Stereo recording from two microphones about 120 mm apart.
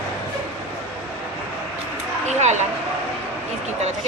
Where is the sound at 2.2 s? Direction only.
80° right.